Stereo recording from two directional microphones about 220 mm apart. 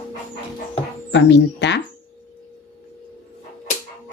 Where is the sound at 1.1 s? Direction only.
55° left (ahead or behind).